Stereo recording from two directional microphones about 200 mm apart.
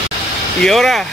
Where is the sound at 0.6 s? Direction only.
Centre (ahead or behind).